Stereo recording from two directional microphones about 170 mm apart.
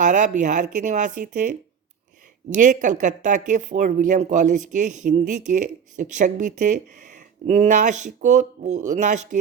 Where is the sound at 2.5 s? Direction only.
50° right (ahead or behind).